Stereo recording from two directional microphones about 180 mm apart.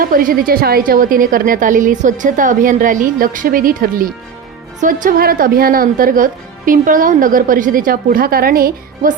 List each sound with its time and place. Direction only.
0.0 s a woman's voice: 50° right (ahead or behind)